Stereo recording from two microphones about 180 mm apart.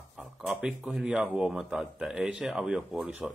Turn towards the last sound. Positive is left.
turn(degrees=-5)  # may be behind; listen again after turning